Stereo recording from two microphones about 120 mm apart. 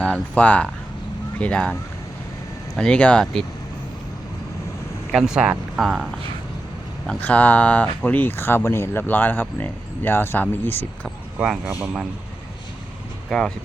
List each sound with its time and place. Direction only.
0.0 s speech: 10° left (ahead or behind)
2.7 s speech: 5° left (ahead or behind)
5.1 s speech: 5° right (ahead or behind)
7.1 s speech: 10° left (ahead or behind)
11.4 s speech: 5° right (ahead or behind)